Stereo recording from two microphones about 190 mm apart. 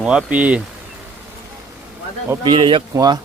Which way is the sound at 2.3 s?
25° right (ahead or behind).